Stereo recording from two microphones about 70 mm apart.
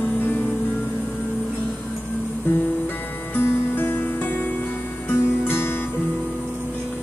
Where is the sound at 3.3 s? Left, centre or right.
Left.